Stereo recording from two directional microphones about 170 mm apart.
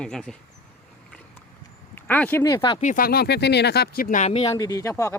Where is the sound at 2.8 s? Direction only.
50° left (ahead or behind).